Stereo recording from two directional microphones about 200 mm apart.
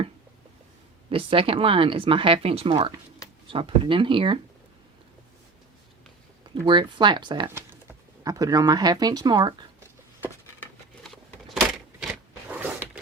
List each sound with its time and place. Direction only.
1.1 s speech: 25° right (ahead or behind)
6.4 s speech: 25° right (ahead or behind)
11.0 s a sound: centre (ahead or behind)